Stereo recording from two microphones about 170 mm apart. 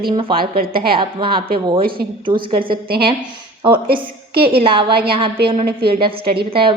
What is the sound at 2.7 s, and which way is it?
Speech, 65° right (ahead or behind).